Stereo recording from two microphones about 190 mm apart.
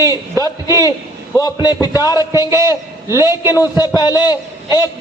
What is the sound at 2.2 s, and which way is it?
A man's voice, 15° right (ahead or behind).